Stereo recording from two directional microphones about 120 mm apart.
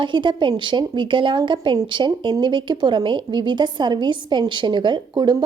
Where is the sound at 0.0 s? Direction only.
40° right (ahead or behind).